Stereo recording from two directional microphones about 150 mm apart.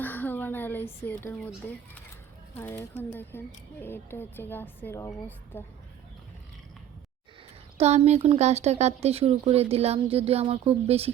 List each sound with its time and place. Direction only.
0.0 s a sound: 10° left (ahead or behind)
2.6 s speech: 15° left (ahead or behind)
7.8 s speech: 45° right (ahead or behind)